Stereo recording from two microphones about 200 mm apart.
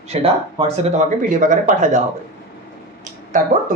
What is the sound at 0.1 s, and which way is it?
Speech, 30° right (ahead or behind).